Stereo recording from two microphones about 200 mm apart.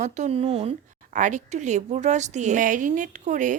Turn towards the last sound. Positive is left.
turn(degrees=-40)  # may be behind; listen again after turning